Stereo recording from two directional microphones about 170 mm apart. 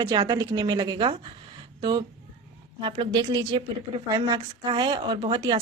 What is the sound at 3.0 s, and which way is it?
Speech, 25° right (ahead or behind).